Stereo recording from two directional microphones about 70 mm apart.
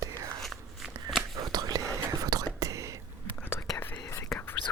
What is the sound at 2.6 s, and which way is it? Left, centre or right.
Whispering, right.